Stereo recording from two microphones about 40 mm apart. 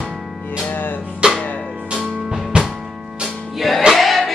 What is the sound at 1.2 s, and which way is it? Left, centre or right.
Music, right.